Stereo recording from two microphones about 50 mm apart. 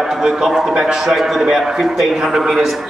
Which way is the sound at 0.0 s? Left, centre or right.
Centre.